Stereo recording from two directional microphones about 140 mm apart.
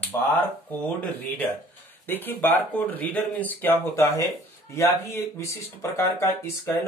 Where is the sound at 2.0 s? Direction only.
15° left (ahead or behind).